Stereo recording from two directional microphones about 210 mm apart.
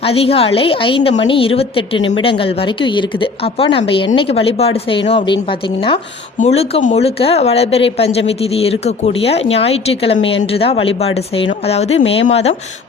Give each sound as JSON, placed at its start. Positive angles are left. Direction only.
{"t": 0.0, "sound": "speech", "side_deg": 30}